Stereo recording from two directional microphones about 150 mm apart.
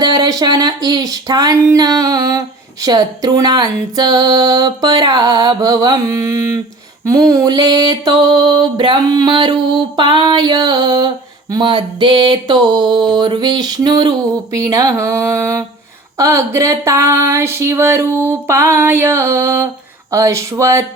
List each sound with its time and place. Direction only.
0.0 s mantra: 25° right (ahead or behind)
16.1 s a sound: 20° right (ahead or behind)
20.1 s mantra: 20° right (ahead or behind)